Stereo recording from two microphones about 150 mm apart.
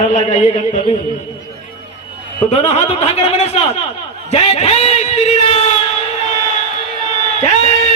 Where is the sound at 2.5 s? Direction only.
45° left (ahead or behind).